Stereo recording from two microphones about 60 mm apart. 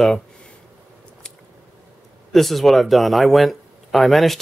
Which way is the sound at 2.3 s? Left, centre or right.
Centre.